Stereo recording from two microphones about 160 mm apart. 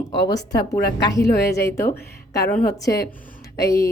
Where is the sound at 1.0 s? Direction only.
20° left (ahead or behind).